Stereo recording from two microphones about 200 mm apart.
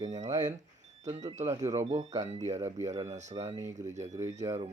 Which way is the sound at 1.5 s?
15° right (ahead or behind).